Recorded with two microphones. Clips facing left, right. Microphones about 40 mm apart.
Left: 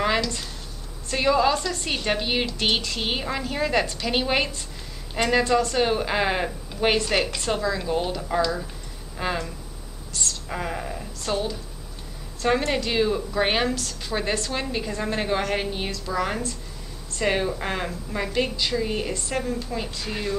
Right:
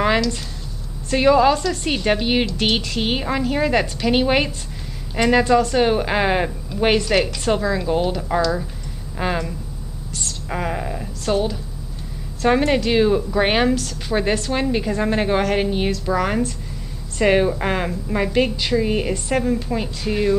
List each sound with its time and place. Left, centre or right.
1.1 s a woman's voice: centre